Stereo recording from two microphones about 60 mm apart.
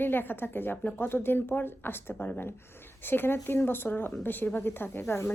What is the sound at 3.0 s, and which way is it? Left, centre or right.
Speech, left.